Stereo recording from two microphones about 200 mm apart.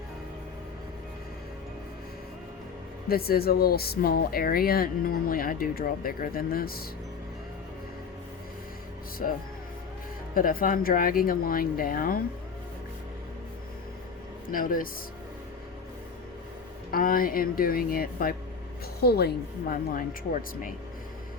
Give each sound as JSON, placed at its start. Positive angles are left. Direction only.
{"t": 3.1, "sound": "speech", "side_deg": 50}
{"t": 9.2, "sound": "speech", "side_deg": 40}
{"t": 14.4, "sound": "speech", "side_deg": 45}
{"t": 16.9, "sound": "speech", "side_deg": 45}